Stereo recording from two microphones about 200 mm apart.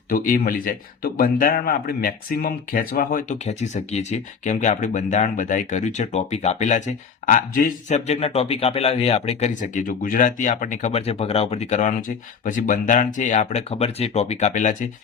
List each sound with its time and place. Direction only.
0.1 s a man's voice: 45° left (ahead or behind)